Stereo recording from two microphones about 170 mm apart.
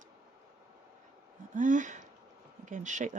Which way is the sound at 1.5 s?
50° right (ahead or behind).